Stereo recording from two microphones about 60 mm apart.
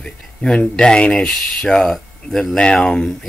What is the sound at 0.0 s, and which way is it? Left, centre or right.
Speech, centre.